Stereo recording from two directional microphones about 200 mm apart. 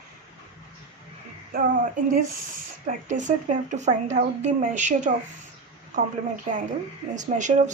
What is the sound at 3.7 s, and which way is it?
A woman's voice, 35° right (ahead or behind).